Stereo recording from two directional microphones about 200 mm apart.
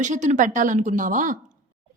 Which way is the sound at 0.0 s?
35° right (ahead or behind).